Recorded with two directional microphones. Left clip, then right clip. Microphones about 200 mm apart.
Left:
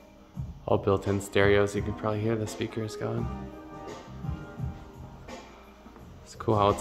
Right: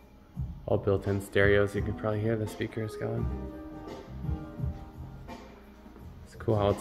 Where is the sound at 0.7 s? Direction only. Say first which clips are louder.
Left 3 dB; 25° left (ahead or behind).